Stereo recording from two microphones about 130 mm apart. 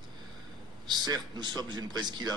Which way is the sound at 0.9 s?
35° right (ahead or behind).